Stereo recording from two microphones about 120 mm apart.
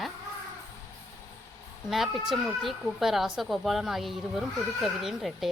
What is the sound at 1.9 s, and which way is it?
A woman's voice, centre (ahead or behind).